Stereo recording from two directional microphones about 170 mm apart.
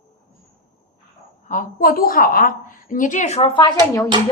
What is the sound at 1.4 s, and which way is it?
A woman's voice, 50° left (ahead or behind).